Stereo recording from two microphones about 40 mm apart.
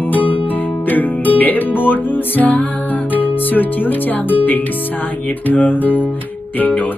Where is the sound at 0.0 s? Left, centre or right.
Left.